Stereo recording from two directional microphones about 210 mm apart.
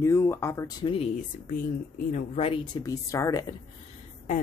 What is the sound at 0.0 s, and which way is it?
Speech, 15° left (ahead or behind).